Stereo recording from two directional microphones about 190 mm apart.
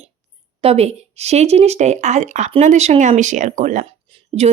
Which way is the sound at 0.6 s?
30° right (ahead or behind).